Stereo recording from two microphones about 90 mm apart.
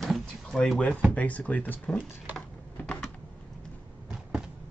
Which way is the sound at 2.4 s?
10° left (ahead or behind).